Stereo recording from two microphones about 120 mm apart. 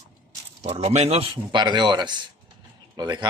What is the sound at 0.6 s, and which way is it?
Speech, 60° right (ahead or behind).